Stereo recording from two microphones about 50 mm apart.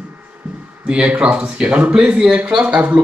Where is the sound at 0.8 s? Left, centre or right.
Right.